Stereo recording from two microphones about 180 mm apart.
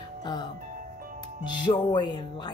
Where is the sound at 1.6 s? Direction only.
25° left (ahead or behind).